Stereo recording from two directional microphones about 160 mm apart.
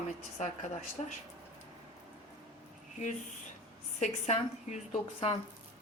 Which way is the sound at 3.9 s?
45° left (ahead or behind).